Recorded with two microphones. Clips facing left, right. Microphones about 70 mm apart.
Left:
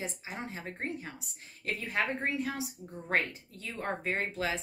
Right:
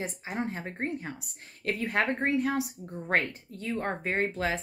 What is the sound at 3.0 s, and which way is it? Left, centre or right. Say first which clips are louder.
A woman's voice: right 3 dB; right.